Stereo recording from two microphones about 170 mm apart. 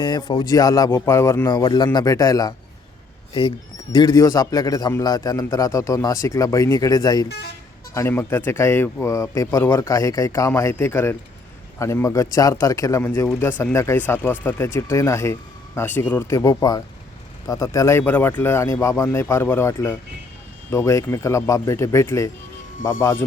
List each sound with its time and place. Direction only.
0.0 s a man's voice: 25° left (ahead or behind)
3.9 s a man's voice: 25° left (ahead or behind)
7.3 s speech: 70° left (ahead or behind)
7.9 s a man's voice: 15° left (ahead or behind)